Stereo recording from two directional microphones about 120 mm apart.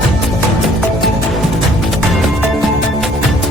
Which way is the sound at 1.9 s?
Centre (ahead or behind).